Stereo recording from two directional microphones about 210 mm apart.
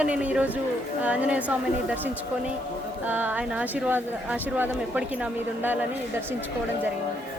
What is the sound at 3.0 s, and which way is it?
Speech, 10° right (ahead or behind).